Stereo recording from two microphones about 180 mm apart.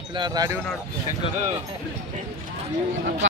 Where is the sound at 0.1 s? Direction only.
25° right (ahead or behind).